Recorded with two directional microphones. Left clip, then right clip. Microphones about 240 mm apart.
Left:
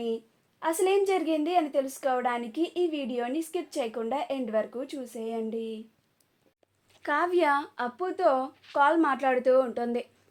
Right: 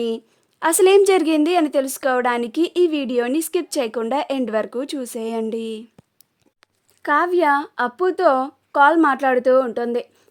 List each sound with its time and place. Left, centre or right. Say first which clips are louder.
0.6 s a woman's voice: right 11 dB; right
7.0 s a woman's voice: right 8 dB; right